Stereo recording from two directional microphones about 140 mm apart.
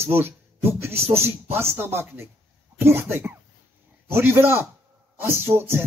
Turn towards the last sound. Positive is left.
turn(degrees=-15)  # may be behind; listen again after turning